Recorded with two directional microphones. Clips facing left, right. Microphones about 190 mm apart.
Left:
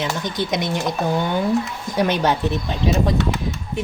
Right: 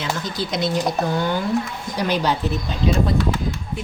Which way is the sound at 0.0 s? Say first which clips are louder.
Left 2 dB; 20° left (ahead or behind).